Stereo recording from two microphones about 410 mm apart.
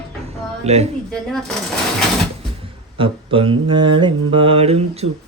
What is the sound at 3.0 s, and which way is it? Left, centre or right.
Speech, centre.